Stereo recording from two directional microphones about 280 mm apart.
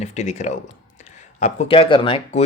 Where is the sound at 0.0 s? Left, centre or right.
Left.